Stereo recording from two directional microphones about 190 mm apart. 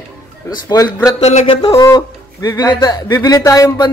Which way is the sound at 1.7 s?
20° left (ahead or behind).